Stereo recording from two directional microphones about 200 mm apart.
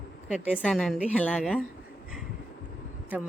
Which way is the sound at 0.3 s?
5° right (ahead or behind).